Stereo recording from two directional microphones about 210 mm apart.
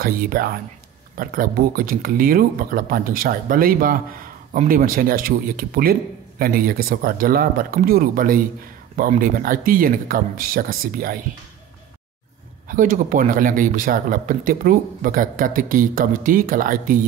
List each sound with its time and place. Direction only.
0.0 s a man's voice: 45° right (ahead or behind)
12.6 s a man's voice: 40° right (ahead or behind)